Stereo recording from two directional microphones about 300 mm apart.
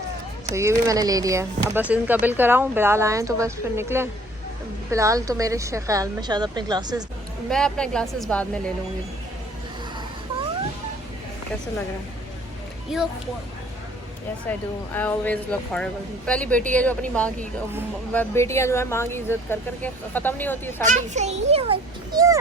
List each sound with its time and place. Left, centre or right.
0.5 s speech: centre
7.5 s speech: centre
12.9 s speech: centre
14.9 s speech: centre
20.8 s a child's voice: right